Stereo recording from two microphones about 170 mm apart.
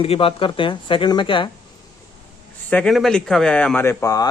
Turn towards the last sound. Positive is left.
turn(degrees=20)  # may be behind; listen again after turning